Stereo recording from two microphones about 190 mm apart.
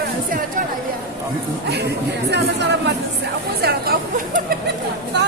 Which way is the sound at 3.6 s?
55° right (ahead or behind).